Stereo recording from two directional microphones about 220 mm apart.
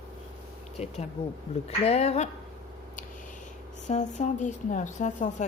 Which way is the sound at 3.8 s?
35° left (ahead or behind).